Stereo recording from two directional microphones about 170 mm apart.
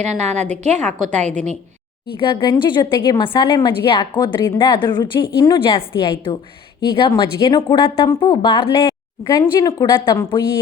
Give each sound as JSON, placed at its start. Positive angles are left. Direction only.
{"t": 0.0, "sound": "a woman's voice", "side_deg": -40}
{"t": 2.1, "sound": "speech", "side_deg": 30}